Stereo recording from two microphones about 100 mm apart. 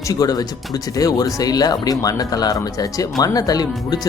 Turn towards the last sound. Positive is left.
turn(degrees=40)  # may be behind; listen again after turning